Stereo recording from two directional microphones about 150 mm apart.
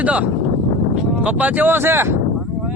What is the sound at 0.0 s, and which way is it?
Speech, 10° right (ahead or behind).